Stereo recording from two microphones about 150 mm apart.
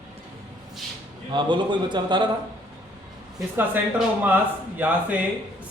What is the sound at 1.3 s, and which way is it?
Speech, 30° right (ahead or behind).